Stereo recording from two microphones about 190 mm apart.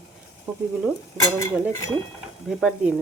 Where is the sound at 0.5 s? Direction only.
15° right (ahead or behind).